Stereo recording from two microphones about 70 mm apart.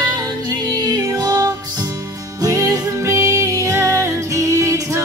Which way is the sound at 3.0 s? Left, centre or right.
Right.